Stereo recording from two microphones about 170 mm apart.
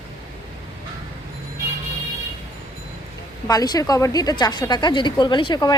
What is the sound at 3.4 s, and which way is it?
Speech, 20° left (ahead or behind).